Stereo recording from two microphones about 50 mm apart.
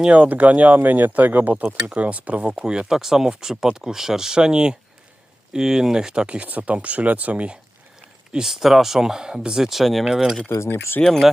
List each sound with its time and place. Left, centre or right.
0.1 s speech: right
1.6 s speech: right
2.6 s speech: centre
8.3 s speech: centre
10.5 s speech: left
11.0 s speech: centre